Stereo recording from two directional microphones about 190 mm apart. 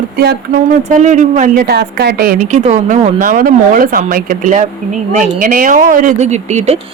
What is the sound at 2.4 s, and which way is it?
Speech, 40° right (ahead or behind).